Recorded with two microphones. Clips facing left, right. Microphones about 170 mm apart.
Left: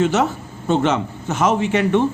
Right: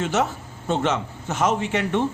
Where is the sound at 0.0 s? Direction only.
80° left.